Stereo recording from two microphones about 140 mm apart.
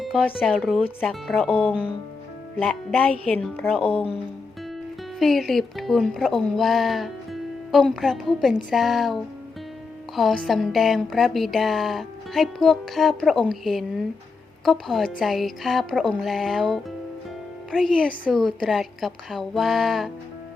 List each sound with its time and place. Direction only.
0.0 s a sound: centre (ahead or behind)
0.3 s speech: 5° left (ahead or behind)
2.6 s speech: 10° left (ahead or behind)
3.8 s speech: 45° left (ahead or behind)
5.2 s speech: centre (ahead or behind)